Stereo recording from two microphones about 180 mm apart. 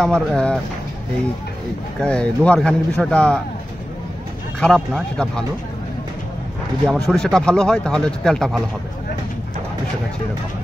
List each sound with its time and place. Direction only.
0.0 s speech: 5° left (ahead or behind)
2.0 s speech: 5° left (ahead or behind)
4.6 s speech: 5° left (ahead or behind)
6.9 s speech: 5° left (ahead or behind)